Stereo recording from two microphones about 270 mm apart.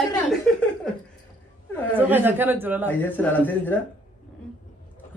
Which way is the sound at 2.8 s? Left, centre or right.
Centre.